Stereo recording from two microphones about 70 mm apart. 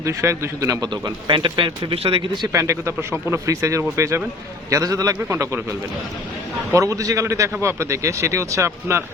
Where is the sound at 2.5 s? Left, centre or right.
Right.